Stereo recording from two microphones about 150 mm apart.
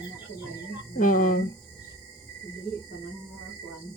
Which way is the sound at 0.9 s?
60° left (ahead or behind).